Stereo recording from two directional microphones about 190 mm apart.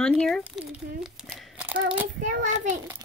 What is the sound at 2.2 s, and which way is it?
Speech, 40° right (ahead or behind).